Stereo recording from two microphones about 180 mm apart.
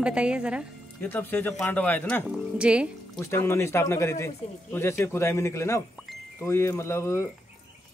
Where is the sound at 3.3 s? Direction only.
15° left (ahead or behind).